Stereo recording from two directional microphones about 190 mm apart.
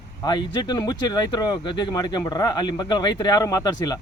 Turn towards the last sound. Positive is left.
turn(degrees=20)  # may be behind; listen again after turning